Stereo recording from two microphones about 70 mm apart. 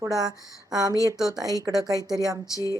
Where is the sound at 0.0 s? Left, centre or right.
Right.